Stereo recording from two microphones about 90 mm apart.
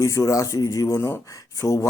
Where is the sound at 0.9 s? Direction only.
25° left (ahead or behind).